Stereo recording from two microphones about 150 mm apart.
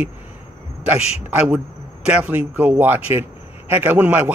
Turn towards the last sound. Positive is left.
turn(degrees=-10)  # may be behind; listen again after turning